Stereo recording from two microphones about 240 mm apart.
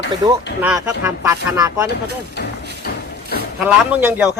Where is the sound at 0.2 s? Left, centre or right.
Centre.